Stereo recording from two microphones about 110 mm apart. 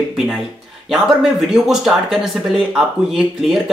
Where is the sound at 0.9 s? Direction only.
5° right (ahead or behind).